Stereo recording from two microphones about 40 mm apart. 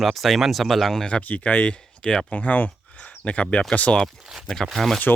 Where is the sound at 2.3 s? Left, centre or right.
Left.